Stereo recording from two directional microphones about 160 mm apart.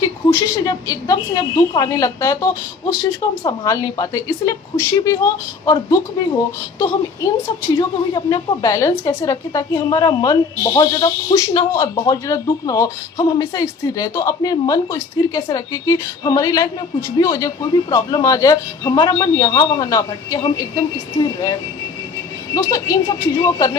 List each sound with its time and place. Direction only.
0.0 s a woman's voice: 20° left (ahead or behind)